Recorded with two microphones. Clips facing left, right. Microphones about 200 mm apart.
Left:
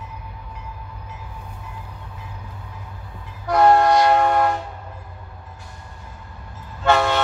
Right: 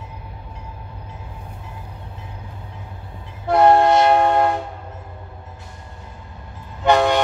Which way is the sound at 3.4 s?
25° right (ahead or behind).